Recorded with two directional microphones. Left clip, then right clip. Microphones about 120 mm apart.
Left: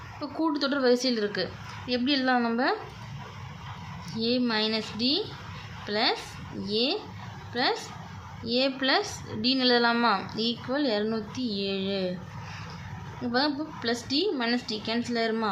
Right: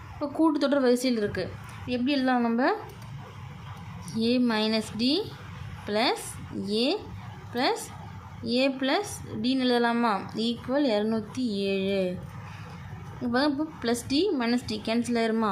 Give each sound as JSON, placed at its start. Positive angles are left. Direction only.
{"t": 0.2, "sound": "a woman's voice", "side_deg": -40}
{"t": 4.1, "sound": "a woman's voice", "side_deg": -40}
{"t": 13.2, "sound": "a woman's voice", "side_deg": -40}